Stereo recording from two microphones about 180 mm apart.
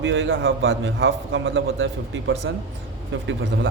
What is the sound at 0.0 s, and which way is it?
A man's voice, 90° right.